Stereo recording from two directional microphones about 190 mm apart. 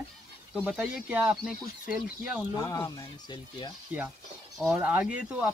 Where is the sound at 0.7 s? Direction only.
5° right (ahead or behind).